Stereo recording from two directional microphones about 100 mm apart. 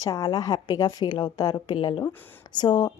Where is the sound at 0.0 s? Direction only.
40° left (ahead or behind).